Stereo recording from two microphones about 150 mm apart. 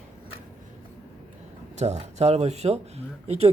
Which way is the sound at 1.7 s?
50° right (ahead or behind).